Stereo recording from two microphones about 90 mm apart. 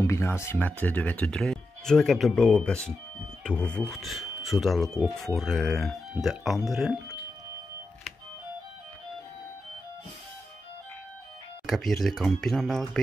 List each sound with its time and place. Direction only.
0.0 s speech: 30° left (ahead or behind)
0.6 s speech: 20° left (ahead or behind)
3.9 s speech: centre (ahead or behind)
11.6 s speech: 5° left (ahead or behind)